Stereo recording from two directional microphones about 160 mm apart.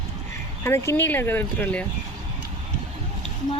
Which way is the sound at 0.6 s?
15° left (ahead or behind).